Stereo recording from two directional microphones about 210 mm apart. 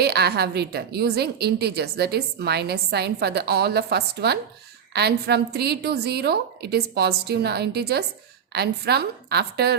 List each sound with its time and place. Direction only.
0.0 s a woman's voice: 50° right (ahead or behind)